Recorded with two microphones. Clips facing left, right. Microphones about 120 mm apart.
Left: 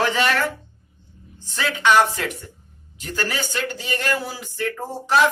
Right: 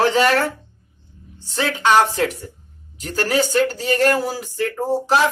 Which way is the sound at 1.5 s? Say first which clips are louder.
Right 2 dB; 35° right (ahead or behind).